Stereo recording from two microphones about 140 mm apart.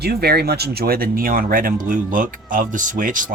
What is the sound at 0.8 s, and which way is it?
Speech, 90° right.